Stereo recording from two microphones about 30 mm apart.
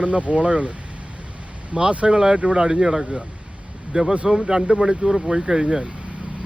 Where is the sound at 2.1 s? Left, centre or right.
Right.